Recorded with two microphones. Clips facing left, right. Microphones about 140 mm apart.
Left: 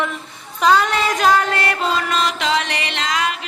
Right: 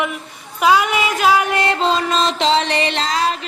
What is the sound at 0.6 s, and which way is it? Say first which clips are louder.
Music: right 1 dB; 10° right (ahead or behind).